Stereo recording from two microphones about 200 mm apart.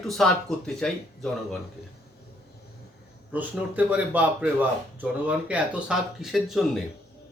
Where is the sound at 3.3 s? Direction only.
10° right (ahead or behind).